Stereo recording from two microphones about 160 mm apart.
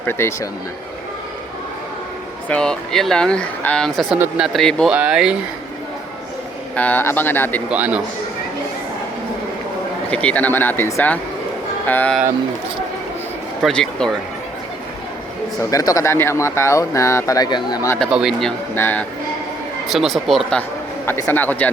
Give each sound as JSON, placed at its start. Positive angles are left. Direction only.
{"t": 0.0, "sound": "speech", "side_deg": 15}
{"t": 2.5, "sound": "speech", "side_deg": 5}
{"t": 6.7, "sound": "speech", "side_deg": 10}
{"t": 7.7, "sound": "speech", "side_deg": -10}
{"t": 10.1, "sound": "speech", "side_deg": 10}
{"t": 13.6, "sound": "speech", "side_deg": 0}
{"t": 15.7, "sound": "speech", "side_deg": 20}
{"t": 18.1, "sound": "speech", "side_deg": -5}
{"t": 18.7, "sound": "speech", "side_deg": 15}
{"t": 19.9, "sound": "speech", "side_deg": 0}